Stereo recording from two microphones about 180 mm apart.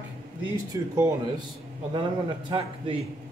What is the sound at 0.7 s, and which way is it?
Speech, 20° right (ahead or behind).